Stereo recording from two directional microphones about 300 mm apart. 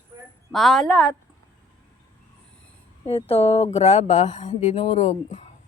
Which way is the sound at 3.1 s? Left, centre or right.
Centre.